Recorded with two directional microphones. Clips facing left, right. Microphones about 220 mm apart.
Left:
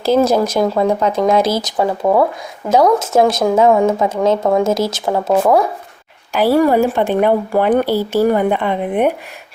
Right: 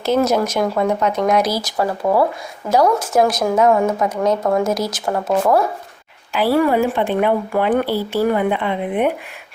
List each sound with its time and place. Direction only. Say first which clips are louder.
0.0 s speech: left 3 dB; 30° left (ahead or behind); by 5.6 s 15° left (ahead or behind)
6.3 s speech: left 3 dB; 40° left (ahead or behind)